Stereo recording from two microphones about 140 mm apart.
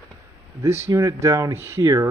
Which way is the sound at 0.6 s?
20° right (ahead or behind).